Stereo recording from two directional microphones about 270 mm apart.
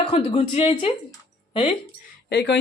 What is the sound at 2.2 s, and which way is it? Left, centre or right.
Speech, left.